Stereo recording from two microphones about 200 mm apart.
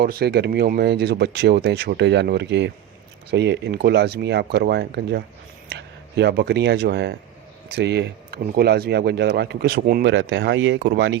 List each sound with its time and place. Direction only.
0.0 s speech: 50° right (ahead or behind)